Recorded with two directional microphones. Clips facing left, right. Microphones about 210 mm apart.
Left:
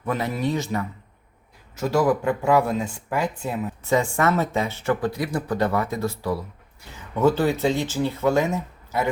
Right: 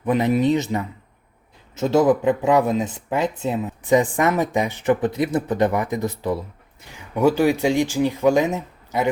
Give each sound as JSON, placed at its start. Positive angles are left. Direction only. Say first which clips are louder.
{"t": 0.0, "sound": "speech", "louder": "right 7 dB", "side_deg": -20}